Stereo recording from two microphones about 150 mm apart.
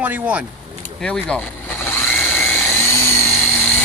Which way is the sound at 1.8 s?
15° left (ahead or behind).